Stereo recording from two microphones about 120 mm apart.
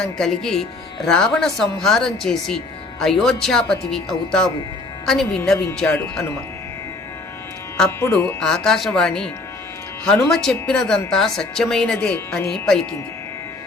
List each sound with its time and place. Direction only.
0.0 s speech: 5° left (ahead or behind)
7.9 s speech: 20° left (ahead or behind); by 12.9 s 5° left (ahead or behind)